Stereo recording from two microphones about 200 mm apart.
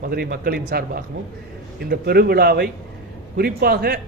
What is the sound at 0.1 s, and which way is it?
Speech, 50° right (ahead or behind).